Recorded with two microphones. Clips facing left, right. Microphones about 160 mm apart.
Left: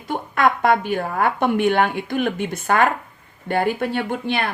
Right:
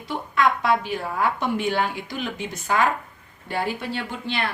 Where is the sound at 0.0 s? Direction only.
55° left (ahead or behind).